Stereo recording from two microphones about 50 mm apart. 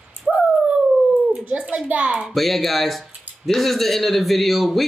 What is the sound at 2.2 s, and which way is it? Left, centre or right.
Speech, centre.